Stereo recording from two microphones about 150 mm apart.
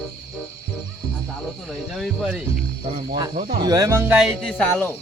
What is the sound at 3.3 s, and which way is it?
Speech, 65° right (ahead or behind).